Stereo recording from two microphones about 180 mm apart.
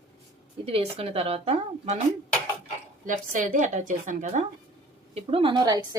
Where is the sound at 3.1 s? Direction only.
45° right (ahead or behind).